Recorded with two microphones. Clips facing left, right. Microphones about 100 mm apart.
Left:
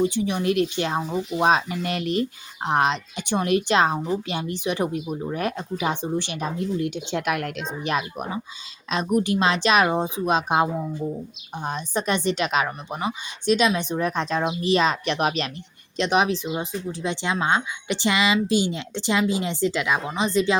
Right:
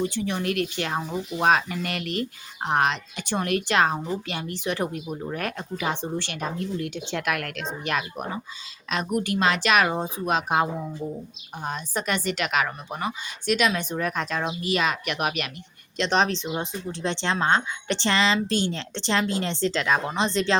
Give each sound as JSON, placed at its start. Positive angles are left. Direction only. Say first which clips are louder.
{"t": 0.0, "sound": "a woman's voice", "louder": "left 4 dB", "side_deg": 15}
{"t": 16.0, "sound": "speech", "louder": "left 2 dB", "side_deg": 10}